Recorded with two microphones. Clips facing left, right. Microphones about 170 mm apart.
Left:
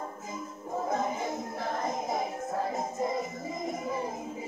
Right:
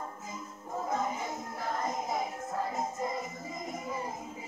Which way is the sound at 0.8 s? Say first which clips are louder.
Left 2 dB; 40° left (ahead or behind).